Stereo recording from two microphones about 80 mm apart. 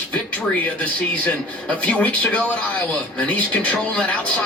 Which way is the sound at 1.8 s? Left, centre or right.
Centre.